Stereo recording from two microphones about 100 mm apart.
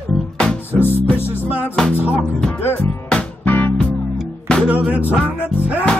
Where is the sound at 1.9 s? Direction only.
15° right (ahead or behind).